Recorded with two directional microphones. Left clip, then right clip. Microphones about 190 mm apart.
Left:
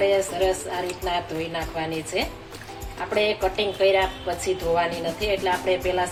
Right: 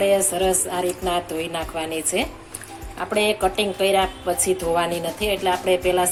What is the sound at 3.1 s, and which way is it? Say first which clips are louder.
A woman's voice: right 2 dB; 50° right (ahead or behind).